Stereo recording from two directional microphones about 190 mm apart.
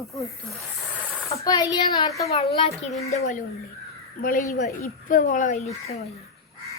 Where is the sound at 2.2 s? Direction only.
35° left (ahead or behind).